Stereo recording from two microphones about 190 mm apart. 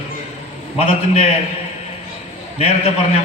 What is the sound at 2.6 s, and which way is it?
Speech, 30° left (ahead or behind).